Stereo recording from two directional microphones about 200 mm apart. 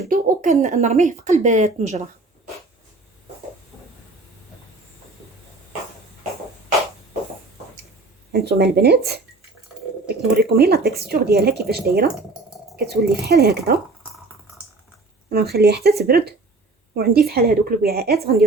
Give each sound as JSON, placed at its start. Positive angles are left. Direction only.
{"t": 0.1, "sound": "speech", "side_deg": -35}
{"t": 8.3, "sound": "speech", "side_deg": -55}
{"t": 10.3, "sound": "speech", "side_deg": -50}
{"t": 15.5, "sound": "speech", "side_deg": -55}